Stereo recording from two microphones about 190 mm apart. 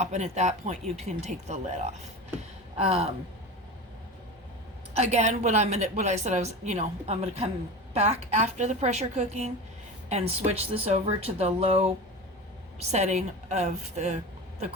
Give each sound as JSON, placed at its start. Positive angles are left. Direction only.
{"t": 0.0, "sound": "a woman's voice", "side_deg": -40}
{"t": 4.9, "sound": "a woman's voice", "side_deg": -35}